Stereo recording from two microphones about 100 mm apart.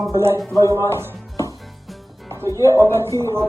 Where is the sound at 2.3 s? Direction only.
30° right (ahead or behind).